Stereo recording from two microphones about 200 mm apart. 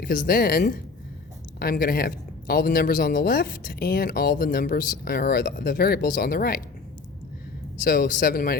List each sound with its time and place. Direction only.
0.0 s speech: 45° left (ahead or behind)
7.9 s speech: 45° left (ahead or behind)